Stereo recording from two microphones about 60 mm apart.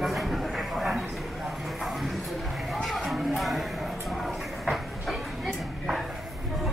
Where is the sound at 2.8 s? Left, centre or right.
Centre.